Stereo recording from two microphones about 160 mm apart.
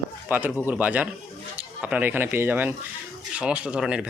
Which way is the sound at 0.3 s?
10° right (ahead or behind).